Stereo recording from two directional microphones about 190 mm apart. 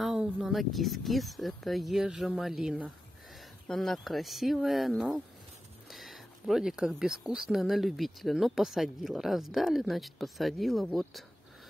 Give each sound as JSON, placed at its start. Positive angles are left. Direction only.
{"t": 0.0, "sound": "speech", "side_deg": 0}